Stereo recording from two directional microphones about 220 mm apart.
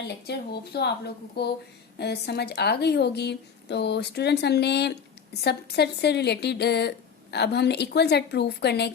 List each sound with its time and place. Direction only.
0.1 s a woman's voice: 45° left (ahead or behind)